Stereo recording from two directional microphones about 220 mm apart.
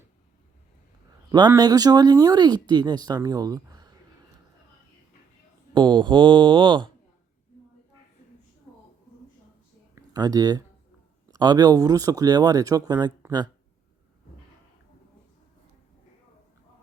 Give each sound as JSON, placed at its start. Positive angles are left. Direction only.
{"t": 1.3, "sound": "speech", "side_deg": -15}
{"t": 5.7, "sound": "speech", "side_deg": -20}
{"t": 9.9, "sound": "a sound", "side_deg": -15}
{"t": 11.3, "sound": "speech", "side_deg": -20}